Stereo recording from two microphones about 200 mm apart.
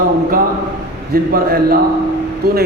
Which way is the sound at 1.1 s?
50° right (ahead or behind).